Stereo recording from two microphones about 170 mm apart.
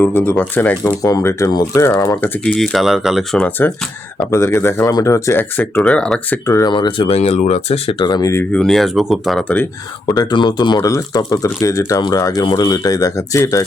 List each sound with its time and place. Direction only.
0.0 s speech: 10° left (ahead or behind)
6.4 s speech: 20° left (ahead or behind)
8.5 s speech: centre (ahead or behind)
10.2 s speech: 25° left (ahead or behind)